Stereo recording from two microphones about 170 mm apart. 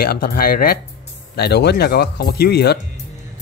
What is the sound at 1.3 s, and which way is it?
Speech, 70° left (ahead or behind).